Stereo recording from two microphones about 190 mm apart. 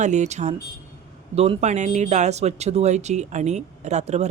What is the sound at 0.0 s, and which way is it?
Speech, 40° right (ahead or behind).